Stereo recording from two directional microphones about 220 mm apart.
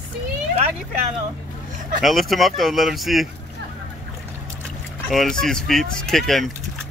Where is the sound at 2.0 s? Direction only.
Centre (ahead or behind).